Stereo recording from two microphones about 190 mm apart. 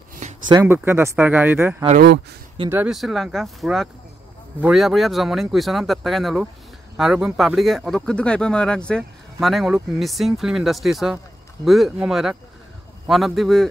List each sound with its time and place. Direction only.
0.5 s speech: 20° right (ahead or behind); by 13.7 s centre (ahead or behind)